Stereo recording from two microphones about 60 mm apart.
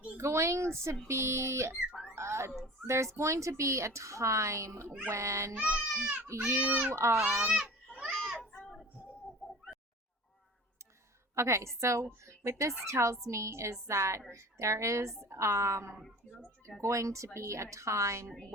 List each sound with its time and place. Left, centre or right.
0.2 s speech: right
2.1 s a sound: right
2.8 s a woman's voice: right
5.5 s speech: right
6.3 s a woman's voice: right
7.2 s speech: centre
7.5 s a sound: centre
8.1 s children playing: centre
8.6 s a sound: centre
9.4 s bird: centre
11.3 s a woman's voice: right